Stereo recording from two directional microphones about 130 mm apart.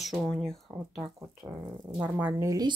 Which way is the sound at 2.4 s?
25° right (ahead or behind).